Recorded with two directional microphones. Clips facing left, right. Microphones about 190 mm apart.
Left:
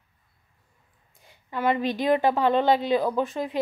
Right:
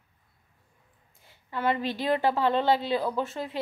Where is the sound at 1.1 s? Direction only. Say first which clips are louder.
Left 2 dB; 15° left (ahead or behind).